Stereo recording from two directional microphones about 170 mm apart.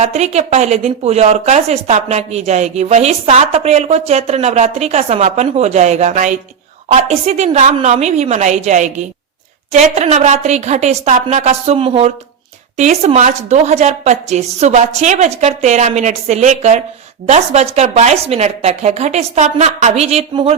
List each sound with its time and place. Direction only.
0.0 s a woman's voice: 40° right (ahead or behind)